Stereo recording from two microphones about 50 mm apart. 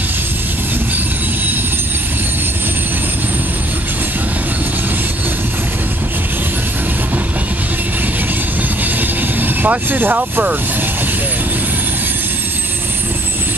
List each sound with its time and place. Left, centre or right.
9.4 s speech: right